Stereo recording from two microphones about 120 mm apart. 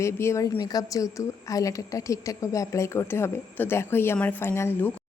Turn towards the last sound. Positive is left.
turn(degrees=20)  # may be behind; listen again after turning